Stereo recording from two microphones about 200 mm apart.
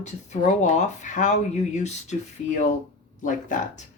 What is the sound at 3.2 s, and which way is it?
Speech, 40° left (ahead or behind).